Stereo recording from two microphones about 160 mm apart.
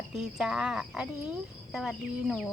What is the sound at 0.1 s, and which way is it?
Speech, 5° right (ahead or behind).